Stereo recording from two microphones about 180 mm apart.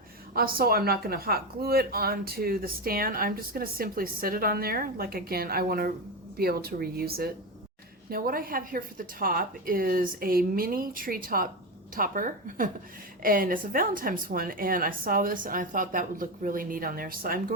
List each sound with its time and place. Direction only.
0.3 s a woman's voice: 55° right (ahead or behind)